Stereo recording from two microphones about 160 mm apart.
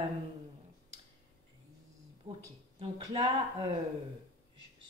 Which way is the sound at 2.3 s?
35° right (ahead or behind).